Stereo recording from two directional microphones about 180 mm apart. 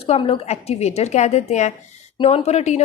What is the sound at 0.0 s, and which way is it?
A woman's voice, 30° left (ahead or behind).